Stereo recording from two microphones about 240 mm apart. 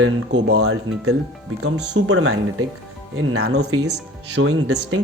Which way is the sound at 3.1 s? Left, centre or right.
Right.